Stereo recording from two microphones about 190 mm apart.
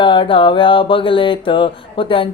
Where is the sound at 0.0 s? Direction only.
25° left (ahead or behind).